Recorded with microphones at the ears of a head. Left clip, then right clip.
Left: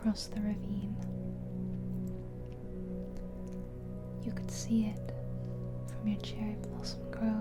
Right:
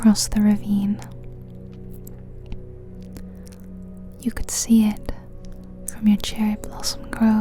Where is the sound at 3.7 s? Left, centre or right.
Right.